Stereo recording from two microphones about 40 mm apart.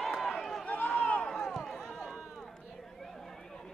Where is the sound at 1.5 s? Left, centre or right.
Centre.